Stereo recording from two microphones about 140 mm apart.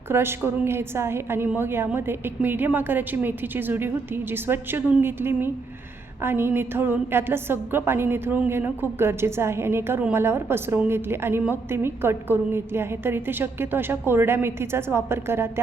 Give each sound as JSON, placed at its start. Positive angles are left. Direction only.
{"t": 0.1, "sound": "a woman's voice", "side_deg": -15}